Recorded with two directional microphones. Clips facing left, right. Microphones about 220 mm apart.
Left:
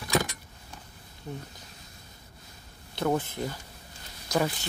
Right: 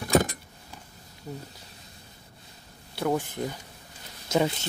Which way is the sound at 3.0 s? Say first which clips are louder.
Even; 10° right (ahead or behind).